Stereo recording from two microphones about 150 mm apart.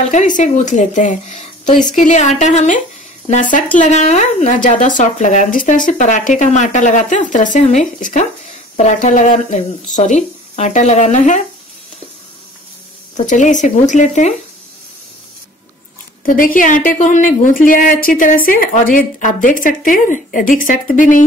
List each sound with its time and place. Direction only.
0.1 s a woman's voice: 55° left (ahead or behind)
13.1 s a woman's voice: 55° left (ahead or behind)
16.3 s a woman's voice: 65° left (ahead or behind)